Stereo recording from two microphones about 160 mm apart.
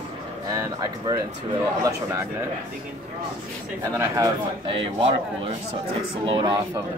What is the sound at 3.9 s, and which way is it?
Speech, 20° right (ahead or behind).